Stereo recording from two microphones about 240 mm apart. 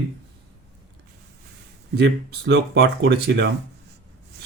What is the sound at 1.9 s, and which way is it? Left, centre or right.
Speech, right.